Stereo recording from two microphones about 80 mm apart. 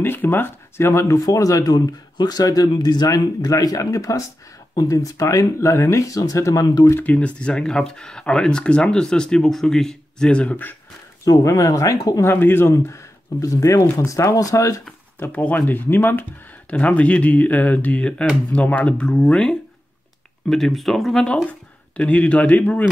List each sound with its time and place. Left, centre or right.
0.0 s speech: left
7.1 s speech: centre
11.2 s speech: left
12.3 s speech: left
12.6 s speech: left
15.1 s speech: left
16.7 s speech: centre